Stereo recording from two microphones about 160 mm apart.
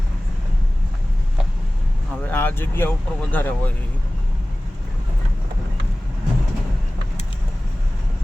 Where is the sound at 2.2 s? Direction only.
10° left (ahead or behind).